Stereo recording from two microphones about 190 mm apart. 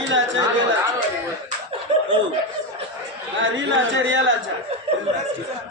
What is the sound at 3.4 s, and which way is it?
Speech, 80° right.